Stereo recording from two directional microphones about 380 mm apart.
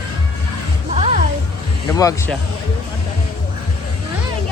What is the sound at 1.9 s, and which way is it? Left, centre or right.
Speech, centre.